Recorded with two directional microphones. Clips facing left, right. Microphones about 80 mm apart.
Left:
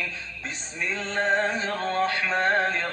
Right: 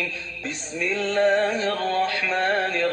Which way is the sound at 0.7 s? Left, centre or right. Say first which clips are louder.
Right 6 dB; left.